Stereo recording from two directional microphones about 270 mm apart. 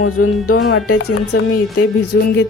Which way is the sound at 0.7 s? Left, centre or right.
Left.